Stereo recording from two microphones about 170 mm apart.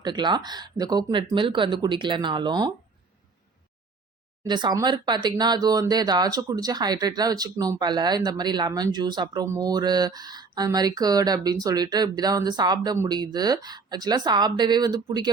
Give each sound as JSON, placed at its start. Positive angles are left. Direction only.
{"t": 0.0, "sound": "speech", "side_deg": -25}
{"t": 4.4, "sound": "speech", "side_deg": -25}